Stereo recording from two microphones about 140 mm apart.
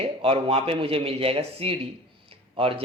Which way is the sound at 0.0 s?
40° right (ahead or behind).